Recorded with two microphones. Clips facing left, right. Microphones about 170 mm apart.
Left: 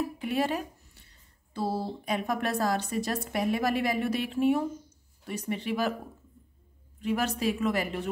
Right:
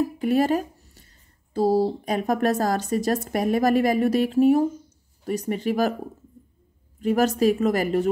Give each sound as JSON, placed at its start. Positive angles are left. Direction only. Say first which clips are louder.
{"t": 0.0, "sound": "a woman's voice", "louder": "right 8 dB", "side_deg": -40}
{"t": 7.0, "sound": "a woman's voice", "louder": "right 9 dB", "side_deg": -40}